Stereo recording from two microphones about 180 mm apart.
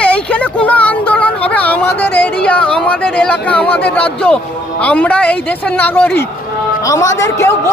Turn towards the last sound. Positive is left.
turn(degrees=15)  # may be behind; listen again after turning